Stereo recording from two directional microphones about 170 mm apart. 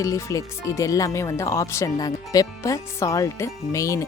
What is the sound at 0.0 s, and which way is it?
Speech, 20° left (ahead or behind).